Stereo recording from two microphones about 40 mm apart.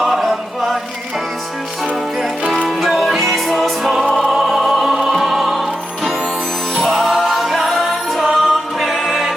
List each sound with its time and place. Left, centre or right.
0.0 s chant: centre
2.6 s music: centre
4.1 s opera: centre
4.9 s music: centre